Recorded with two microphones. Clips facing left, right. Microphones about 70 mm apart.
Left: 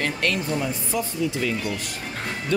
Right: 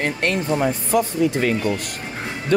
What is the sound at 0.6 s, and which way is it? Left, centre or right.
Speech, right.